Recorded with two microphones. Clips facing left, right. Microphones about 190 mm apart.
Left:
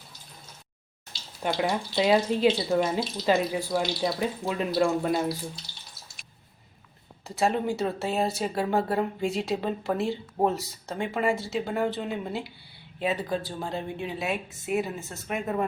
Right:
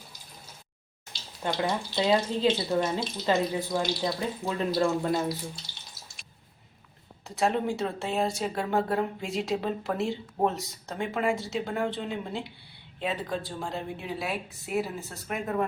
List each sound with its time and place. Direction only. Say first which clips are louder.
1.4 s speech: left 2 dB; 15° left (ahead or behind)
7.3 s speech: left 1 dB; centre (ahead or behind)